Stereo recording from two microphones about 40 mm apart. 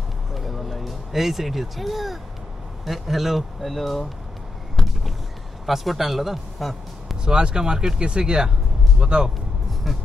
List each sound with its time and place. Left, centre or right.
0.3 s a sound: centre
2.8 s speech: centre
4.8 s a sound: centre
5.7 s speech: centre
7.2 s speech: centre
9.9 s speech: centre